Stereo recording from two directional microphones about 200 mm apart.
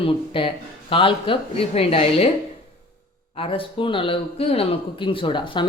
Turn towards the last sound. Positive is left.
turn(degrees=25)  # may be behind; listen again after turning